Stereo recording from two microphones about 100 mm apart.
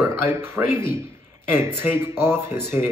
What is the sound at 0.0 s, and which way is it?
Speech, 25° right (ahead or behind).